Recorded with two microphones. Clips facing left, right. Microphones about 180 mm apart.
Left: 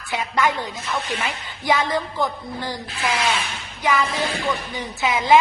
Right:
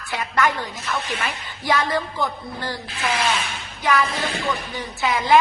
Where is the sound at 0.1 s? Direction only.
20° left (ahead or behind).